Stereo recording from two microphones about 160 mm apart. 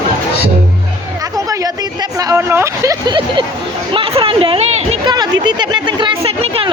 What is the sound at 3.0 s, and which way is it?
A woman's voice, 30° right (ahead or behind).